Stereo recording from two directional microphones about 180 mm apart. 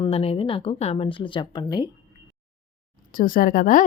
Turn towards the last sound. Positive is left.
turn(degrees=50)  # may be behind; listen again after turning